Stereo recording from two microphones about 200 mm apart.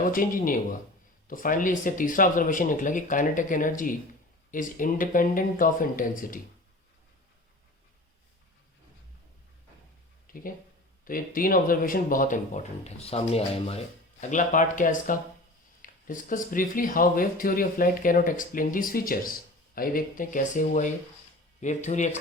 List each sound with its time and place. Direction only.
0.1 s speech: 45° left (ahead or behind)
10.2 s speech: 45° left (ahead or behind)